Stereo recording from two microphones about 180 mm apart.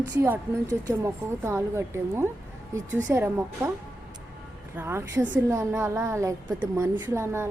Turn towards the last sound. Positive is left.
turn(degrees=-15)  # may be behind; listen again after turning